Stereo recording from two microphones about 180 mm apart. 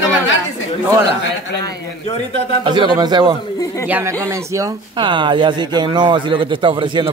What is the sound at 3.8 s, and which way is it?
Speech, 10° right (ahead or behind).